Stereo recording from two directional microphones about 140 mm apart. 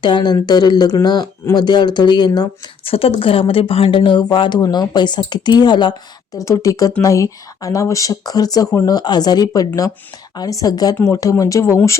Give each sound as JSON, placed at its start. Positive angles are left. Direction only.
{"t": 0.0, "sound": "speech", "side_deg": 30}
{"t": 2.8, "sound": "speech", "side_deg": 45}